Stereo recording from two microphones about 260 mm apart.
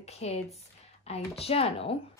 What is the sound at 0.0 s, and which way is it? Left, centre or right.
Speech, left.